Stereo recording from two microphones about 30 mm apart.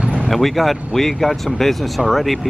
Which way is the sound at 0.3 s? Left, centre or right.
Centre.